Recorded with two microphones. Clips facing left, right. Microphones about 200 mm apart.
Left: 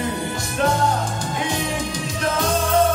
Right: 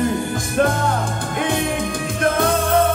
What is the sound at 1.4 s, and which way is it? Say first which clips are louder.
Music: right 5 dB; 55° right (ahead or behind).